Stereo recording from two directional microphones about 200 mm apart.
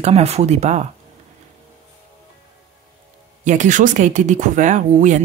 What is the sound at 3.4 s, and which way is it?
Speech, 40° right (ahead or behind).